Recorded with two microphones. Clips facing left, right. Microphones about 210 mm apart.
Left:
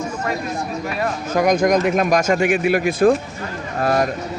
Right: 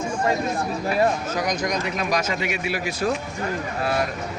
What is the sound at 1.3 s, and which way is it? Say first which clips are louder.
Speech: left 9 dB; 50° left (ahead or behind).